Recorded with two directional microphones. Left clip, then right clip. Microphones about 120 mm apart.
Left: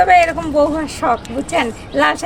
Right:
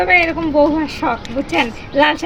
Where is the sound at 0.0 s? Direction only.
55° left (ahead or behind).